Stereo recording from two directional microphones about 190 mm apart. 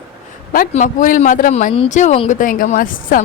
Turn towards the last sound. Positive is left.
turn(degrees=45)  # may be behind; listen again after turning